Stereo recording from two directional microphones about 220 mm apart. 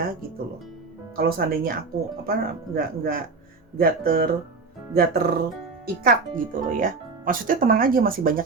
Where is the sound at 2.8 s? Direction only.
40° right (ahead or behind).